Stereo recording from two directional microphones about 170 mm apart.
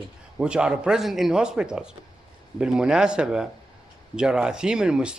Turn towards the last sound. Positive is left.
turn(degrees=-5)  # may be behind; listen again after turning